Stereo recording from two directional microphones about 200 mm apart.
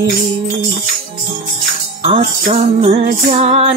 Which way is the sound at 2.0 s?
35° right (ahead or behind).